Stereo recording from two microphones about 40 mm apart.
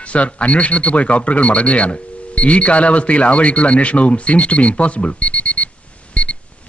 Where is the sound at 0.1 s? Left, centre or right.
Left.